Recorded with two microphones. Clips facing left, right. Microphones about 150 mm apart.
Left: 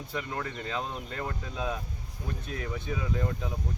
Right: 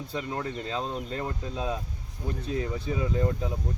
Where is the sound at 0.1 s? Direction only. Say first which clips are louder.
Right 2 dB; 25° right (ahead or behind).